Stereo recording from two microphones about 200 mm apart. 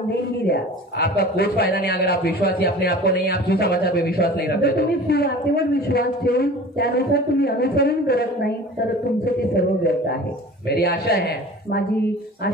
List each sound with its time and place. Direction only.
0.5 s a man's voice: 50° left (ahead or behind)